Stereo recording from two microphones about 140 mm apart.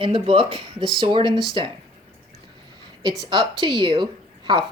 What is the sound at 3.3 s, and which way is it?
Speech, 35° right (ahead or behind).